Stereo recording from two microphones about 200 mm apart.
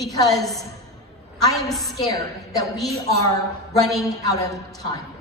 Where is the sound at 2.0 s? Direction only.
15° left (ahead or behind).